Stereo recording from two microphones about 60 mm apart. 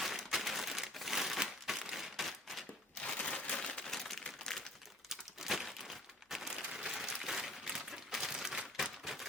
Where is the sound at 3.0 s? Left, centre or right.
Centre.